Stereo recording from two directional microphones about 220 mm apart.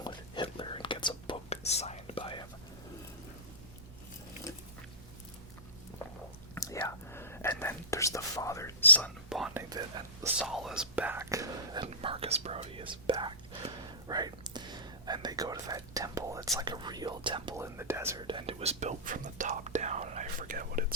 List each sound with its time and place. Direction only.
0.0 s whispering: 20° left (ahead or behind)
6.5 s whispering: 15° left (ahead or behind); by 9.6 s centre (ahead or behind)
9.6 s whispering: 20° right (ahead or behind)
10.3 s whispering: centre (ahead or behind); by 17.7 s 20° right (ahead or behind)
17.7 s whispering: 10° right (ahead or behind); by 20.8 s 40° right (ahead or behind)